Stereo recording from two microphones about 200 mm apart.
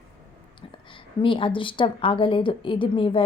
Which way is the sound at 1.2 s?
25° left (ahead or behind).